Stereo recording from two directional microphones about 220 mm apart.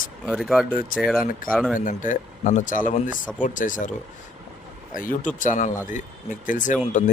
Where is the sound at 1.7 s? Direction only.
35° left (ahead or behind).